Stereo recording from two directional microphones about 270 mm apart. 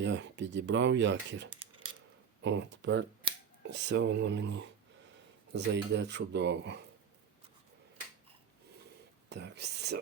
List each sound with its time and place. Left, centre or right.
0.0 s speech: right
1.5 s a sound: centre
2.4 s speech: right
9.3 s speech: right